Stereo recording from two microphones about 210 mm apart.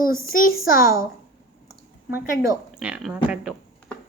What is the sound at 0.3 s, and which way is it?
Speech, 45° left (ahead or behind).